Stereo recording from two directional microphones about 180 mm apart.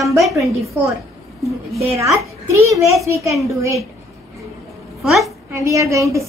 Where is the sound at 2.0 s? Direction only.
15° right (ahead or behind).